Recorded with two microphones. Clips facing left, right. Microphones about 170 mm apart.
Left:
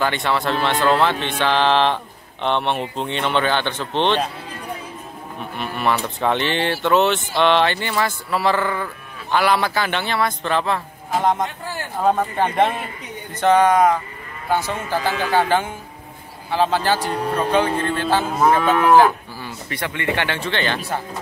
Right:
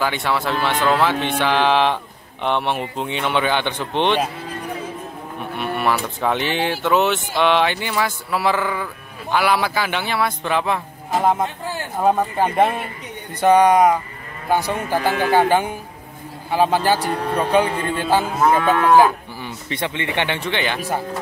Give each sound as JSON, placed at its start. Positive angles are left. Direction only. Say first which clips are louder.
{"t": 0.0, "sound": "speech", "louder": "left 1 dB", "side_deg": -5}
{"t": 5.6, "sound": "speech", "louder": "right 1 dB", "side_deg": -5}
{"t": 18.9, "sound": "cattle", "louder": "even", "side_deg": -15}
{"t": 19.7, "sound": "speech", "louder": "even", "side_deg": -20}